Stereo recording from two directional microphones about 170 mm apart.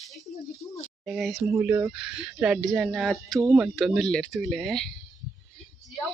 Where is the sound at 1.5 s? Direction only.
15° right (ahead or behind).